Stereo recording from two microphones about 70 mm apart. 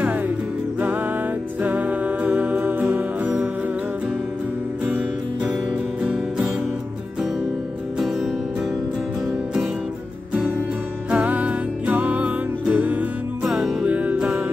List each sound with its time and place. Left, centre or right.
1.6 s music: right
6.0 s music: centre
11.1 s music: right
13.4 s music: centre
13.8 s music: right